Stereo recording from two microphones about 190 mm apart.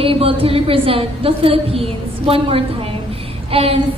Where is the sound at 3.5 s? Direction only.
30° right (ahead or behind).